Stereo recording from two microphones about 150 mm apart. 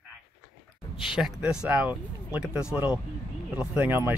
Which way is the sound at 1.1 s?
5° right (ahead or behind).